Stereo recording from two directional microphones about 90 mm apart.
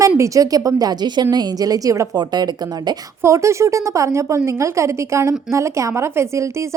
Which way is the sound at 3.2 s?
35° right (ahead or behind).